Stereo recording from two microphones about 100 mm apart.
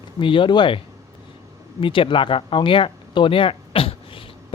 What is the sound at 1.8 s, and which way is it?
Speech, 60° left (ahead or behind).